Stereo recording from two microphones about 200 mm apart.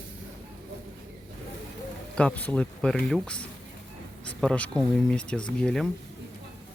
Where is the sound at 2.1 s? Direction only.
5° left (ahead or behind).